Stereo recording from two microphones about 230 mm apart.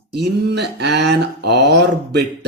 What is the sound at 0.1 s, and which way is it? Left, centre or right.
Speech, right.